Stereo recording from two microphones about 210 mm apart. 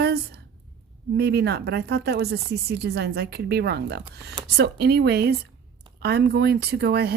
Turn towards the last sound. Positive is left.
turn(degrees=-50)  # may be behind; listen again after turning